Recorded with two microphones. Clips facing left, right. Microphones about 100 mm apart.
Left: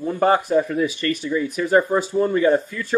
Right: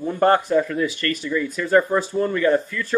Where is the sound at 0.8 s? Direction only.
20° left (ahead or behind).